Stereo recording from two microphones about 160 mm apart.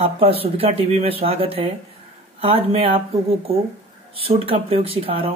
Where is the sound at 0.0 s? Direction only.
40° right (ahead or behind).